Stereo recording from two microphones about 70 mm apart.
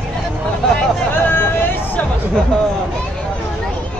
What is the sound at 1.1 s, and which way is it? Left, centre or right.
Vehicle, left.